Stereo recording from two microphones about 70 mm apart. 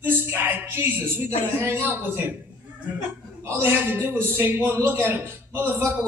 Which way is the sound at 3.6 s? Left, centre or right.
Right.